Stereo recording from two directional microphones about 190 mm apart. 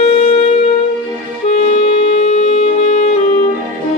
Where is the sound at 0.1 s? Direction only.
30° left (ahead or behind).